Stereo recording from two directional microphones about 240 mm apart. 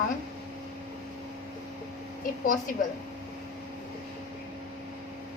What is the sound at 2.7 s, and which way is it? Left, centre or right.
Speech, left.